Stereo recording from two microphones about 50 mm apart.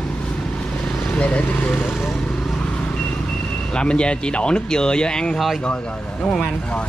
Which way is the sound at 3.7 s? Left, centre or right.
Centre.